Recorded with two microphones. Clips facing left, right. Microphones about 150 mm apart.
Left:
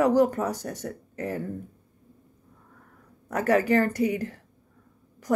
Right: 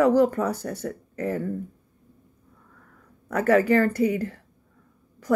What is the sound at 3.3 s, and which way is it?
Speech, 20° left (ahead or behind).